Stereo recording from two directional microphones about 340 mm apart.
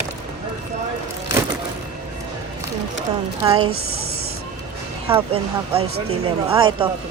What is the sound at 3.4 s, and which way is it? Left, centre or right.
Speech, centre.